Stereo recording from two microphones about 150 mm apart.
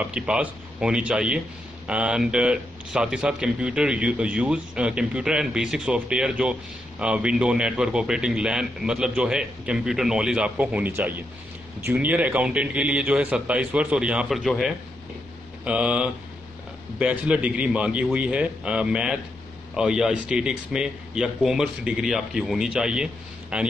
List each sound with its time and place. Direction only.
0.0 s a man's voice: 10° right (ahead or behind)